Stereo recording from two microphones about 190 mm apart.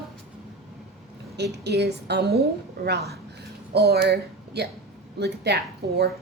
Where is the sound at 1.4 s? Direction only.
60° right (ahead or behind).